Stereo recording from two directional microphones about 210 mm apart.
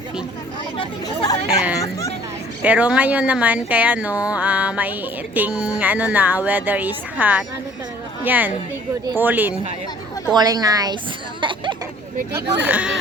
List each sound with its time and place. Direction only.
0.8 s chatter: 20° left (ahead or behind)
1.8 s bow-wow: 15° left (ahead or behind)
2.6 s speech: 5° right (ahead or behind)
11.3 s a sound: 20° right (ahead or behind)
12.3 s speech: 10° right (ahead or behind)